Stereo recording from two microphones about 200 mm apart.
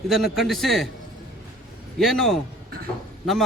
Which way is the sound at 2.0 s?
Centre (ahead or behind).